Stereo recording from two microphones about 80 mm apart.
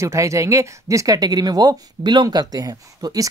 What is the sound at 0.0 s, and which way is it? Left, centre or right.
Speech, right.